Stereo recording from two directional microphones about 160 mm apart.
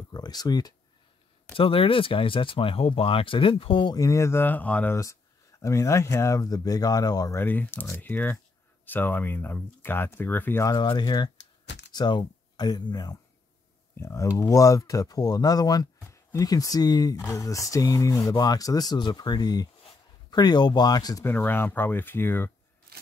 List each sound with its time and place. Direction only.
0.1 s speech: 25° left (ahead or behind)
10.7 s speech: 30° left (ahead or behind)